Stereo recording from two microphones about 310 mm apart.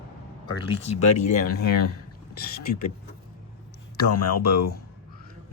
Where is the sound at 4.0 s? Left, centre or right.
Left.